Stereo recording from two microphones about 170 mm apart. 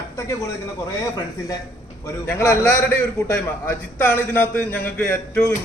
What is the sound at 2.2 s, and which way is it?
A man's voice, 15° left (ahead or behind).